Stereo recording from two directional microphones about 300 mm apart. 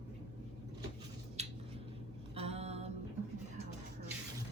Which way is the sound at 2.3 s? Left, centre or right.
Right.